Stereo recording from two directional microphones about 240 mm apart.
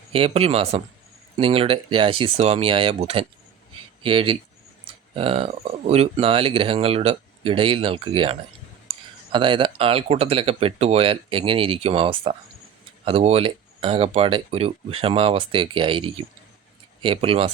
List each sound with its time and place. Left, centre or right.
0.1 s speech: right